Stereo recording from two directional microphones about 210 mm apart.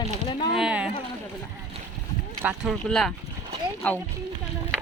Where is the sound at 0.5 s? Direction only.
5° right (ahead or behind).